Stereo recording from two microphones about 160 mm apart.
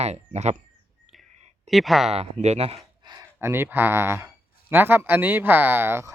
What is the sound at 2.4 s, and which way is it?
Speech, 40° right (ahead or behind).